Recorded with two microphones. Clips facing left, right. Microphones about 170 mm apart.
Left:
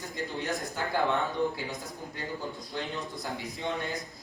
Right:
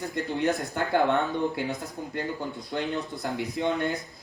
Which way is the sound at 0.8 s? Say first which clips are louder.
Right 5 dB; 60° right (ahead or behind).